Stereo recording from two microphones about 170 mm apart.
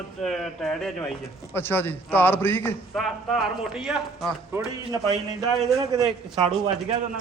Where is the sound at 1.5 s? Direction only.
15° left (ahead or behind).